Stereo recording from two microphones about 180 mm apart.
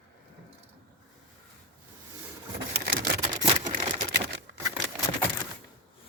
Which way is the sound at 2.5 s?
60° right (ahead or behind).